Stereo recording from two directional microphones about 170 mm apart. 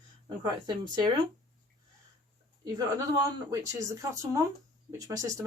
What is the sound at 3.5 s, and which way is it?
Speech, 20° right (ahead or behind).